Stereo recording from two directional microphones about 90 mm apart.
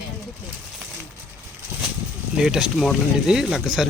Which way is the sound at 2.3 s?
10° right (ahead or behind).